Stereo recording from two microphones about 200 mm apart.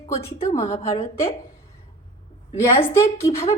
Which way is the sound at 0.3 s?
15° left (ahead or behind).